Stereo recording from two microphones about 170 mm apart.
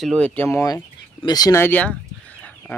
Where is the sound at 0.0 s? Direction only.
5° left (ahead or behind).